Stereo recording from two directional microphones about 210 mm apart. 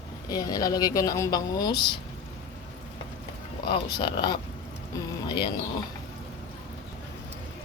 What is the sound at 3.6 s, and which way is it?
Speech, 25° left (ahead or behind).